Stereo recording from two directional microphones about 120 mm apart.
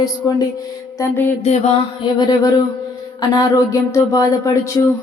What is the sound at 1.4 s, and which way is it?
Music, 60° left (ahead or behind).